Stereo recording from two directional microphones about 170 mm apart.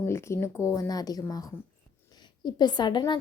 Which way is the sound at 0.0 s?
15° left (ahead or behind).